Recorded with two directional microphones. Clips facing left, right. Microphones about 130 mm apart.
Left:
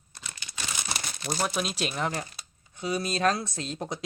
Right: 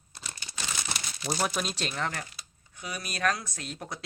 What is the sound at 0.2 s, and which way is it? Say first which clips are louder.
Crumpling: even; 35° right (ahead or behind).